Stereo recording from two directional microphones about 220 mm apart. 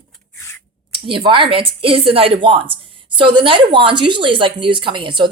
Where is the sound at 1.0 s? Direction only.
20° right (ahead or behind).